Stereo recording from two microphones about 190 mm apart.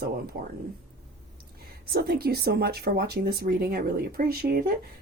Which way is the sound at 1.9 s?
55° right (ahead or behind).